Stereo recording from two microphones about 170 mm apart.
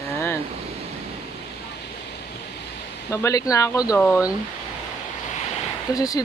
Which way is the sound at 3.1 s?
20° left (ahead or behind).